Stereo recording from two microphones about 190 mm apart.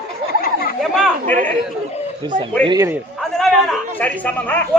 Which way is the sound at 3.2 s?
Centre (ahead or behind).